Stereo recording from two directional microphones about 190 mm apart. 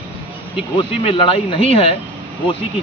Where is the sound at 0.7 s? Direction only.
25° left (ahead or behind).